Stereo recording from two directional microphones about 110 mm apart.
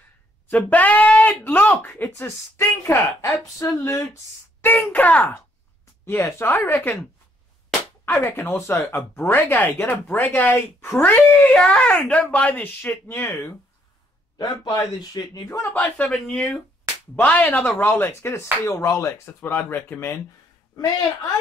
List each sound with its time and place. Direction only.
0.5 s speech: 15° left (ahead or behind)
6.0 s speech: 25° left (ahead or behind)
14.4 s a man's voice: 35° left (ahead or behind)
15.7 s speech: 15° left (ahead or behind)